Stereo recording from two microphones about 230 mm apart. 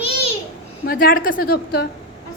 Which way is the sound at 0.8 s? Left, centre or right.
Left.